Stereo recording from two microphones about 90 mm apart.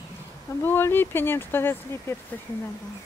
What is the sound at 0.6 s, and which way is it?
Speech, 25° left (ahead or behind).